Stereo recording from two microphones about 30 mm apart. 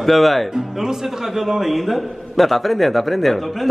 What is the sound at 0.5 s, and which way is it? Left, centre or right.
Speech, centre.